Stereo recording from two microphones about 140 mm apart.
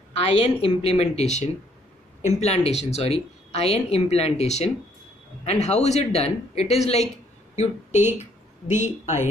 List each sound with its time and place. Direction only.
0.1 s a woman's voice: 45° left (ahead or behind)
8.2 s speech: 55° left (ahead or behind)